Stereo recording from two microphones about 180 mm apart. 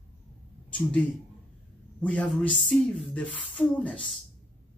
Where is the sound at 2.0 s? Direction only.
5° left (ahead or behind).